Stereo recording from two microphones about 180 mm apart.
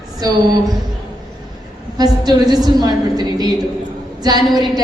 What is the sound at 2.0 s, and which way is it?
A woman's voice, 20° right (ahead or behind).